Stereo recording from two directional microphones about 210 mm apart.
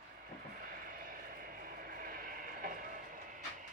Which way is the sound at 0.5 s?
40° right (ahead or behind).